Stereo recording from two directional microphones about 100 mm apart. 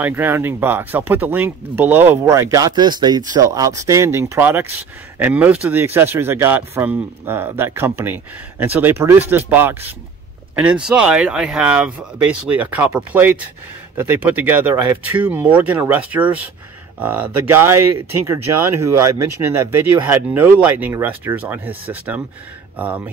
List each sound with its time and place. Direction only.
0.0 s speech: 20° right (ahead or behind)
2.7 s speech: 45° right (ahead or behind); by 17.6 s 20° right (ahead or behind)
19.4 s speech: 20° right (ahead or behind)